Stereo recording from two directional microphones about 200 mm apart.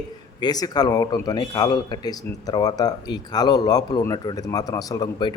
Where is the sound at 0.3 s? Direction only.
20° left (ahead or behind).